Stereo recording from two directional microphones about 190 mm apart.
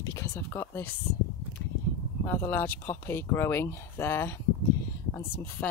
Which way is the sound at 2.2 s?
10° left (ahead or behind).